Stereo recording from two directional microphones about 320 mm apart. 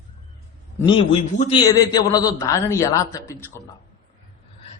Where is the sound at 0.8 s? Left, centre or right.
Centre.